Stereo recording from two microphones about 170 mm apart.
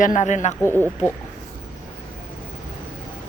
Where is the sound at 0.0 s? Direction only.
45° left (ahead or behind).